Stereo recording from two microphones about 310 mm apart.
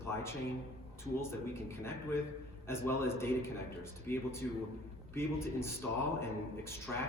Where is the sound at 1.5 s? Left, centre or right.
Centre.